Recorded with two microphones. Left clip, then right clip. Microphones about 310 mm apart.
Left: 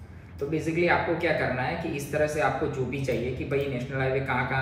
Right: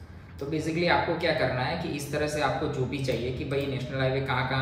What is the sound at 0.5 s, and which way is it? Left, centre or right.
A woman's voice, right.